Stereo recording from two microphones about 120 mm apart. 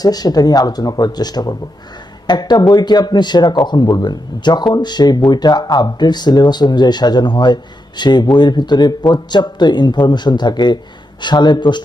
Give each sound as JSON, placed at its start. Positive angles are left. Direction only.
{"t": 0.0, "sound": "speech", "side_deg": 35}